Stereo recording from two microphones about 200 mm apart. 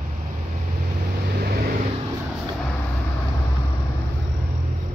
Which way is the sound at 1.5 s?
50° right (ahead or behind).